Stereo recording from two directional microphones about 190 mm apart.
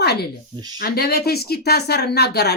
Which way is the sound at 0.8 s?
55° left (ahead or behind).